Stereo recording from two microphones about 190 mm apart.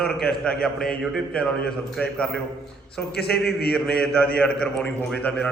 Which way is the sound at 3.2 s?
60° left (ahead or behind).